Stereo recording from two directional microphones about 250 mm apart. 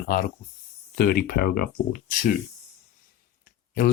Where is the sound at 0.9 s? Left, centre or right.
Left.